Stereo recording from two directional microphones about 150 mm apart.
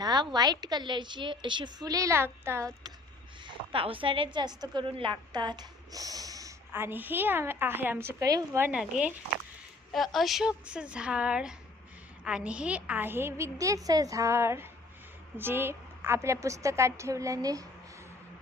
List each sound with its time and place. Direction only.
0.0 s a sound: 25° right (ahead or behind)
0.3 s a woman's voice: 25° right (ahead or behind)
3.4 s a woman's voice: 35° right (ahead or behind); by 8.8 s 15° right (ahead or behind)
9.9 s a woman's voice: centre (ahead or behind); by 17.7 s 25° right (ahead or behind)